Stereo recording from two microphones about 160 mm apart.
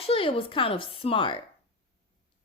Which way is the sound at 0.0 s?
35° left (ahead or behind).